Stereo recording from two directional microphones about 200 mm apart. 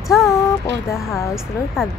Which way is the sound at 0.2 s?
15° left (ahead or behind).